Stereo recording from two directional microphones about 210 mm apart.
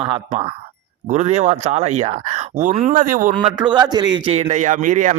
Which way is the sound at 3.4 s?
20° right (ahead or behind).